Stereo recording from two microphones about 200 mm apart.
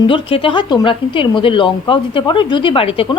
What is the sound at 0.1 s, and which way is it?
Speech, 25° left (ahead or behind).